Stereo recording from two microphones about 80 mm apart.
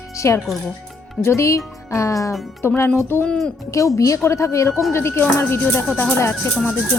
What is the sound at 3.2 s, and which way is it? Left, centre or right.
Speech, centre.